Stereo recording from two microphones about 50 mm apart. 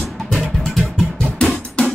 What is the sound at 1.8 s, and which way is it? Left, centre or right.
Drum, left.